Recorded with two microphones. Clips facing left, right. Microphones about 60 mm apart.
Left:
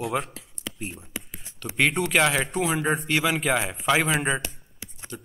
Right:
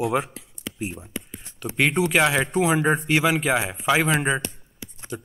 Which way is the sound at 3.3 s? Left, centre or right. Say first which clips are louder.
Right 2 dB; centre.